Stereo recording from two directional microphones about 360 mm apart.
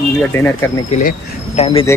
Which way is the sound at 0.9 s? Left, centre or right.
Centre.